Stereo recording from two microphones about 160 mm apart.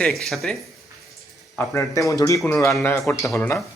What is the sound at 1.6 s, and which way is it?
A man's voice, 20° left (ahead or behind).